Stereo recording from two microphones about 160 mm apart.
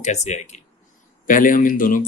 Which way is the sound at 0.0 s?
45° left (ahead or behind).